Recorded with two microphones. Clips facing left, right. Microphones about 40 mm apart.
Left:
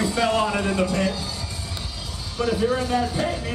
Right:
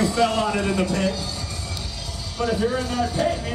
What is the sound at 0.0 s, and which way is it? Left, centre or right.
Speech, centre.